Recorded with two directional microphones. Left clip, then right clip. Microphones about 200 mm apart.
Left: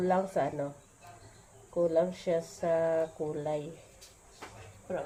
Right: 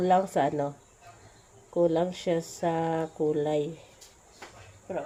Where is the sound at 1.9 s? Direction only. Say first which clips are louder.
Right 1 dB; 50° right (ahead or behind).